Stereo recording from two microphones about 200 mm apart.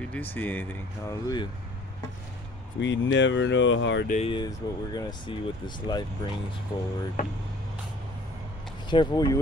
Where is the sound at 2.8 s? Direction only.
65° left (ahead or behind).